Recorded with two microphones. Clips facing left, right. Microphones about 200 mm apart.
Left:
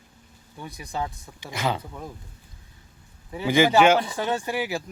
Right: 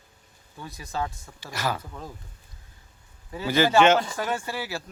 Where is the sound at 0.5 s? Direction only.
15° left (ahead or behind).